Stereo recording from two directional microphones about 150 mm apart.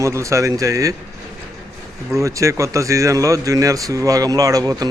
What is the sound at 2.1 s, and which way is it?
A man's voice, 20° right (ahead or behind).